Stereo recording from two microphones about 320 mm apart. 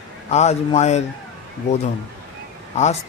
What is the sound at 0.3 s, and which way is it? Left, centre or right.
Speech, left.